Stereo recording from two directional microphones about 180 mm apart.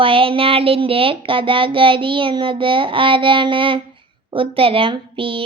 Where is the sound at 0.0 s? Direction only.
30° right (ahead or behind).